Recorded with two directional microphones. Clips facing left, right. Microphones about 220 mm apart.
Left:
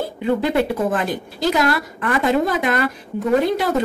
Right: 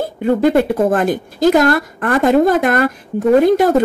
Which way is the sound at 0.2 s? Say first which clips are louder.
Right 6 dB; 50° right (ahead or behind).